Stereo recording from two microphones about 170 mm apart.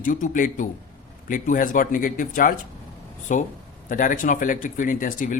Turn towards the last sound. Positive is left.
turn(degrees=50)  # may be behind; listen again after turning